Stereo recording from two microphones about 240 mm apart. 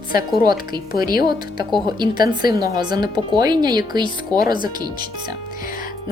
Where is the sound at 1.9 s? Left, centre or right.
Centre.